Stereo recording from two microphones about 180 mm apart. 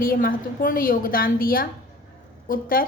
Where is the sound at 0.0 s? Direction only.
50° left (ahead or behind).